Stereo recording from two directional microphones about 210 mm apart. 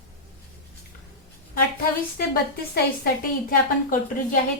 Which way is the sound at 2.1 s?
45° left (ahead or behind).